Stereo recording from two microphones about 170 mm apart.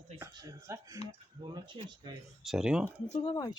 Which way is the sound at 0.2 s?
20° right (ahead or behind).